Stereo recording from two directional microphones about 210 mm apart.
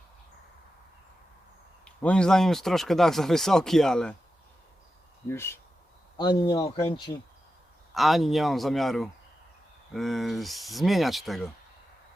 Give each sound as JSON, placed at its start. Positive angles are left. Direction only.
{"t": 1.8, "sound": "speech", "side_deg": 5}
{"t": 5.3, "sound": "speech", "side_deg": 10}
{"t": 7.9, "sound": "speech", "side_deg": 0}